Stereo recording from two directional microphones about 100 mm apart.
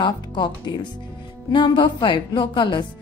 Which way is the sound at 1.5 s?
50° left (ahead or behind).